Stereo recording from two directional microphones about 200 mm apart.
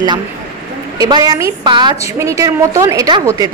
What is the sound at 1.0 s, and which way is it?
A woman's voice, 20° right (ahead or behind).